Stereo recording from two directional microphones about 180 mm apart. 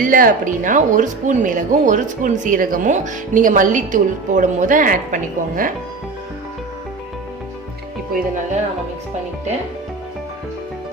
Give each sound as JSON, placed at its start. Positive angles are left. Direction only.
{"t": 0.0, "sound": "speech", "side_deg": -50}